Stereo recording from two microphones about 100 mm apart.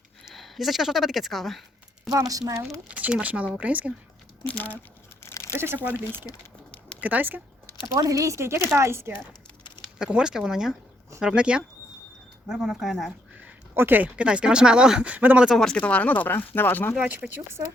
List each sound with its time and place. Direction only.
0.3 s speech: centre (ahead or behind)
2.0 s speech: 35° right (ahead or behind)
2.9 s speech: 10° right (ahead or behind)
4.4 s speech: 15° left (ahead or behind)
5.2 s crumpling: 30° left (ahead or behind)
5.5 s speech: 25° right (ahead or behind)
7.0 s speech: 15° right (ahead or behind)
7.9 s speech: 35° right (ahead or behind)
10.0 s speech: 5° right (ahead or behind)
13.7 s speech: 20° right (ahead or behind)
15.4 s speech: 5° left (ahead or behind); by 16.9 s 20° left (ahead or behind)
17.1 s speech: 20° right (ahead or behind)